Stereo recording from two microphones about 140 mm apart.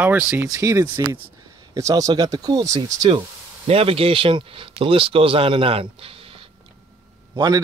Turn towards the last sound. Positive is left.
turn(degrees=-30)  # may be behind; listen again after turning